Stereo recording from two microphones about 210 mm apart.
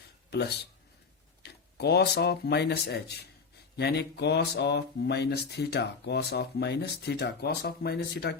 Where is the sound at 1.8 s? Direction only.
50° left (ahead or behind).